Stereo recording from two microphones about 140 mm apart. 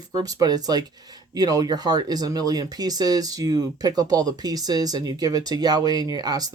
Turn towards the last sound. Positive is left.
turn(degrees=-30)  # may be behind; listen again after turning